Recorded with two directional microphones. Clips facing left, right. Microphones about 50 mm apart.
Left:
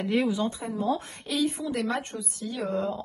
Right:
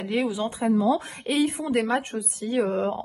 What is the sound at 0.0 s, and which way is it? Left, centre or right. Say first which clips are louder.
Speech: even; centre.